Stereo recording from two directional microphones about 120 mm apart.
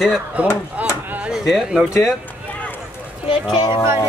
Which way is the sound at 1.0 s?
15° right (ahead or behind).